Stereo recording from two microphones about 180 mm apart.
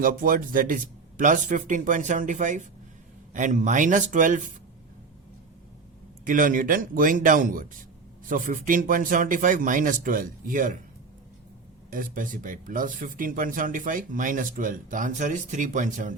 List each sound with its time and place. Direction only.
0.0 s speech: 50° right (ahead or behind)
6.2 s speech: 50° right (ahead or behind)
11.9 s speech: 50° right (ahead or behind)